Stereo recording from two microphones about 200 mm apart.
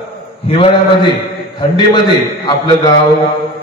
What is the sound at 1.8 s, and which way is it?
A man's voice, 20° left (ahead or behind).